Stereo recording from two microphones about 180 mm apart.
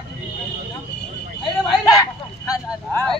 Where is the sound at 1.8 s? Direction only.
20° left (ahead or behind).